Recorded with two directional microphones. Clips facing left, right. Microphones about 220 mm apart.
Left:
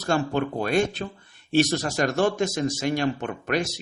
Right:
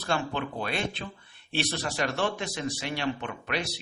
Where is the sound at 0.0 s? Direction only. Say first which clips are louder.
Left 6 dB; 45° left (ahead or behind).